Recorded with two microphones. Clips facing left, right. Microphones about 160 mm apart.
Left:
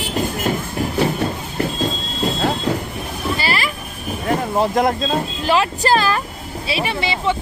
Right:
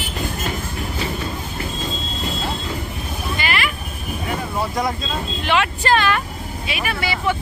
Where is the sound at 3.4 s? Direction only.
35° left (ahead or behind).